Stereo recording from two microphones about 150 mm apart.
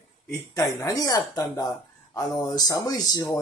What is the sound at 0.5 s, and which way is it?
Speech, 25° left (ahead or behind).